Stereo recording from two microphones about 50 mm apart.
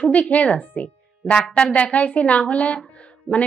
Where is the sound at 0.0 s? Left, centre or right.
Left.